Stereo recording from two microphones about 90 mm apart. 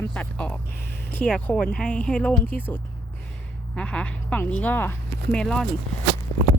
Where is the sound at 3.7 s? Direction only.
15° left (ahead or behind).